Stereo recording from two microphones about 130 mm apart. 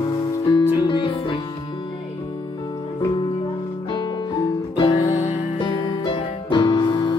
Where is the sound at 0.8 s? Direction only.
35° left (ahead or behind).